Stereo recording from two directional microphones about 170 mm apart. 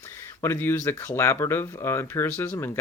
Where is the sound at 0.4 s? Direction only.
15° left (ahead or behind).